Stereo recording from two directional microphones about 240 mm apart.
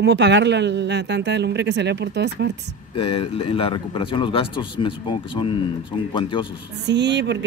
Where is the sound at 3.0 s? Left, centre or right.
Left.